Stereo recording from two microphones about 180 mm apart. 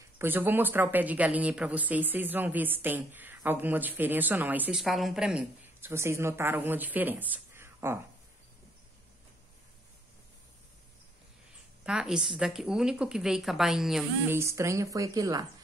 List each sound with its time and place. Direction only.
0.2 s speech: 10° right (ahead or behind)
11.8 s a woman's voice: 5° right (ahead or behind)
14.3 s speech: 15° right (ahead or behind)